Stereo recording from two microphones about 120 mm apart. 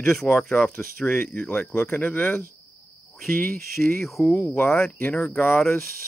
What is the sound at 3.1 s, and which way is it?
Speech, centre (ahead or behind).